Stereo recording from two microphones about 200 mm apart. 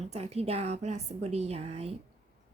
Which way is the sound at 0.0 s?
30° right (ahead or behind).